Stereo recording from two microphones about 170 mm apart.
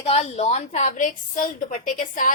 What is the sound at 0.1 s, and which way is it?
A woman's voice, 40° left (ahead or behind).